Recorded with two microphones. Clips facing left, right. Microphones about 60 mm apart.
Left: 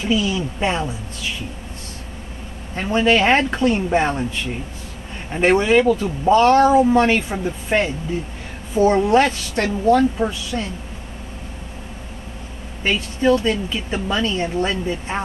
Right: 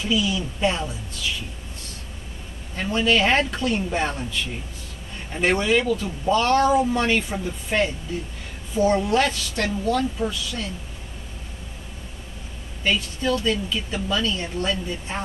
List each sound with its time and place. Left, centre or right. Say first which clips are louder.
0.0 s speech: left 3 dB; left
2.7 s speech: left 4 dB; left
12.8 s speech: left 5 dB; left